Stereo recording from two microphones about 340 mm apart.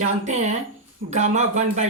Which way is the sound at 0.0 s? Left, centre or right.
Right.